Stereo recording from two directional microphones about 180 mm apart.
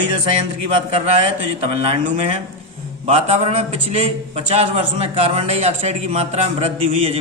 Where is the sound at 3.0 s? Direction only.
35° right (ahead or behind).